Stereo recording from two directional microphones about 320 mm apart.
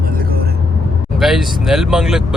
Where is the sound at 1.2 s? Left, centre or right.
Centre.